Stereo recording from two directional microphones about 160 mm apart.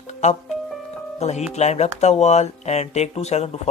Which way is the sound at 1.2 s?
45° left (ahead or behind).